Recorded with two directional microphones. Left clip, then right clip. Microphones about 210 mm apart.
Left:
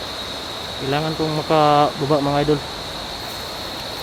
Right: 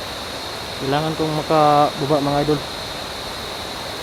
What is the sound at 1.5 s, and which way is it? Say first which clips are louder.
Speech: even; 20° left (ahead or behind).